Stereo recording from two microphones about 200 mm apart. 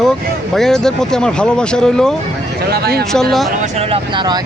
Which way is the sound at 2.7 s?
50° right (ahead or behind).